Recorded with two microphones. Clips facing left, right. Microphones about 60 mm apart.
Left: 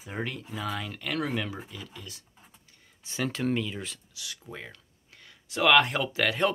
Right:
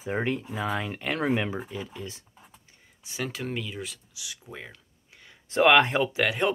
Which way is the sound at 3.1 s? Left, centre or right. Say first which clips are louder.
Left 4 dB; centre.